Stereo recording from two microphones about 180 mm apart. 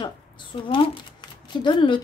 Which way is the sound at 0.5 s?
30° left (ahead or behind).